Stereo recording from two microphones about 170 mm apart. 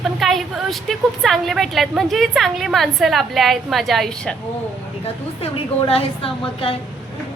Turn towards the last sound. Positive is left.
turn(degrees=35)  # may be behind; listen again after turning